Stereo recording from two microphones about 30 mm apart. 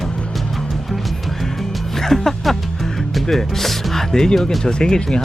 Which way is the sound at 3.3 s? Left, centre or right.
Centre.